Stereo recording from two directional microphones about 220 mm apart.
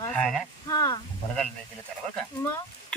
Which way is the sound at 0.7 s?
15° left (ahead or behind).